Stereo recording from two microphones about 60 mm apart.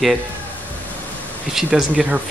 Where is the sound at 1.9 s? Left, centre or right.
Right.